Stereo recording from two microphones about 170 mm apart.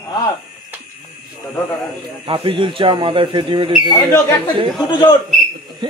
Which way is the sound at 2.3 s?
30° right (ahead or behind).